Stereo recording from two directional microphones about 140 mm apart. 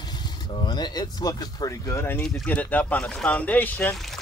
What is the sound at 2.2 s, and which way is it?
Speech, 5° left (ahead or behind).